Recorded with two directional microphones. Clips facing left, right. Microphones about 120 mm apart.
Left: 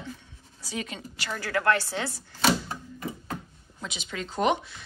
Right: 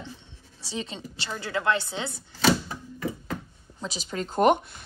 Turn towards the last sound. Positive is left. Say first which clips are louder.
# right 4 dB
turn(degrees=-50)  # may be behind; listen again after turning